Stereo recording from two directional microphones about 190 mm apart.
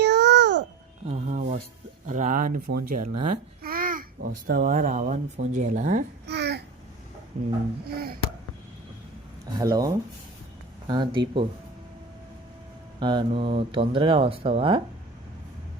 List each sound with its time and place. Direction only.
0.0 s babbling: 60° right (ahead or behind)
1.0 s music: 40° right (ahead or behind)
2.0 s a child's voice: 40° right (ahead or behind)
6.2 s babbling: 60° right (ahead or behind)
7.3 s speech: 40° right (ahead or behind)
7.9 s a sound: 50° right (ahead or behind)
9.6 s speech: 20° right (ahead or behind)
13.0 s speech: 25° right (ahead or behind)